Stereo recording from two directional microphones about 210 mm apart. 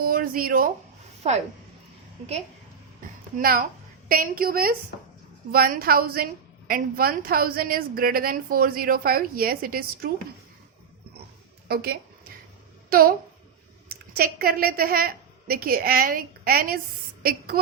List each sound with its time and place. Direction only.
0.0 s a woman's voice: 45° right (ahead or behind)
3.3 s a woman's voice: 45° right (ahead or behind)
11.7 s a woman's voice: 50° right (ahead or behind)